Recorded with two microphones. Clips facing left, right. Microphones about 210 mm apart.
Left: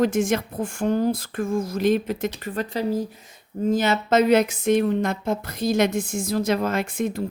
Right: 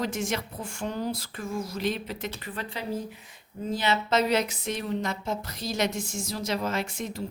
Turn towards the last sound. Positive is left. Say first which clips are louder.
# left 7 dB
turn(degrees=55)  # may be behind; listen again after turning